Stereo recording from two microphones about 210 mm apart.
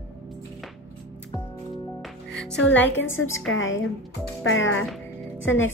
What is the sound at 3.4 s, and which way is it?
A woman's voice, 70° left (ahead or behind).